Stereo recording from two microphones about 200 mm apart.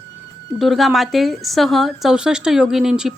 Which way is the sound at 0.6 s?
Centre (ahead or behind).